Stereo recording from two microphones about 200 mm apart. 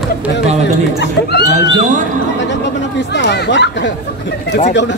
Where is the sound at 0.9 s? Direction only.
55° left (ahead or behind).